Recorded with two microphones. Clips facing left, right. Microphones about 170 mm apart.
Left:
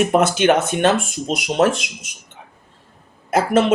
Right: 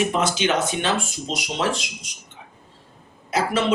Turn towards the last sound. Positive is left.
turn(degrees=50)  # may be behind; listen again after turning